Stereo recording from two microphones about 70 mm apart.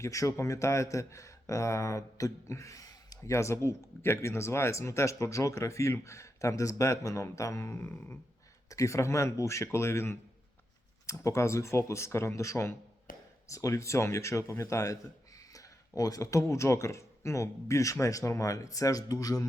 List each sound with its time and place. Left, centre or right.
0.0 s speech: left
3.2 s speech: left
8.7 s speech: left
15.4 s a sound: left
16.0 s speech: left